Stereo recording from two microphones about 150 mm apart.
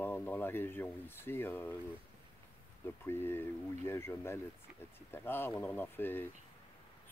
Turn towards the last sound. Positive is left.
turn(degrees=15)  # may be behind; listen again after turning